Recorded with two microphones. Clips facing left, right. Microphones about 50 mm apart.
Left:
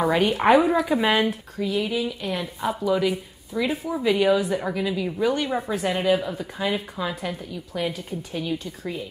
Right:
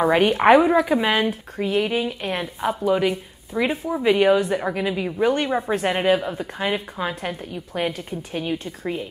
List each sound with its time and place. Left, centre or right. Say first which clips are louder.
0.0 s a woman's voice: right 3 dB; right
0.9 s speech: right 1 dB; centre
1.6 s a woman's voice: right 3 dB; right